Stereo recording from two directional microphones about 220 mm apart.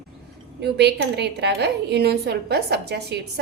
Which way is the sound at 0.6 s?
50° right (ahead or behind).